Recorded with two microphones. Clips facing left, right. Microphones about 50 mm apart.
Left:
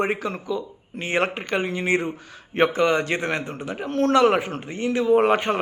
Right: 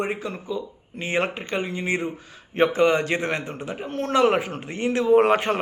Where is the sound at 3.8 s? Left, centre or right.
Left.